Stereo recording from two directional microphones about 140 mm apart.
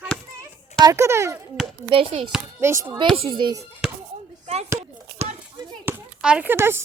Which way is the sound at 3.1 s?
40° right (ahead or behind).